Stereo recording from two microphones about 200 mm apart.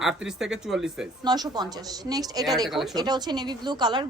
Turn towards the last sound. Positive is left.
turn(degrees=-20)  # may be behind; listen again after turning